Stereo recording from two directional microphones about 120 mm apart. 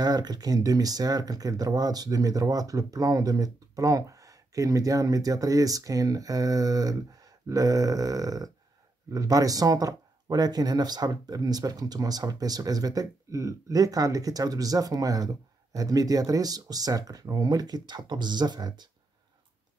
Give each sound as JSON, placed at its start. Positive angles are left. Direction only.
{"t": 0.0, "sound": "speech", "side_deg": -35}